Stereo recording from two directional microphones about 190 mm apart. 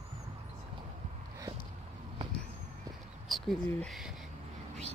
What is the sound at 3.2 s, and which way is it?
Speech, centre (ahead or behind).